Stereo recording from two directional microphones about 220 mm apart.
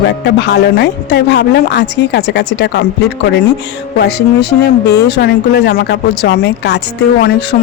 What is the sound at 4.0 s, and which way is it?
Speech, 50° left (ahead or behind).